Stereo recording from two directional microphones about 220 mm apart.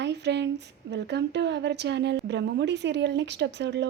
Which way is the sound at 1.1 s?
50° right (ahead or behind).